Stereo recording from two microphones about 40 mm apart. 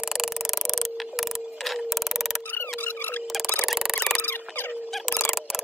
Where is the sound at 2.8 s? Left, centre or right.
Left.